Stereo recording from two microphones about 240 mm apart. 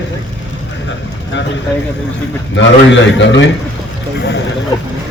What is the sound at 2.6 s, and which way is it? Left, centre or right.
Speech, left.